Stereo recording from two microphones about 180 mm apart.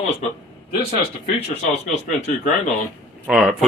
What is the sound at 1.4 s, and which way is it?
Speech, 40° left (ahead or behind).